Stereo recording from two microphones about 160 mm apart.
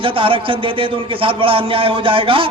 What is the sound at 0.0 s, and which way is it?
A man's voice, 35° right (ahead or behind).